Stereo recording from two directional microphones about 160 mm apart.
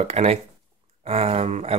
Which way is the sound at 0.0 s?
40° right (ahead or behind).